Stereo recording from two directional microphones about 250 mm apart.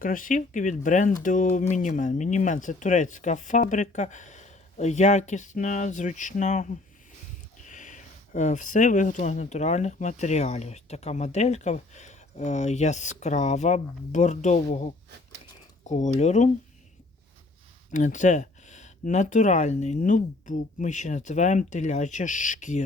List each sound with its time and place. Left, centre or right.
0.0 s speech: left
15.9 s speech: left
17.9 s speech: left